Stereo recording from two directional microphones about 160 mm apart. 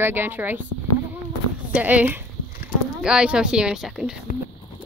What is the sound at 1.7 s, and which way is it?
Speech, 10° right (ahead or behind).